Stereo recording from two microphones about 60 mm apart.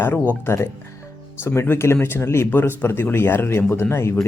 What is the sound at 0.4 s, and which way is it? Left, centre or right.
Speech, left.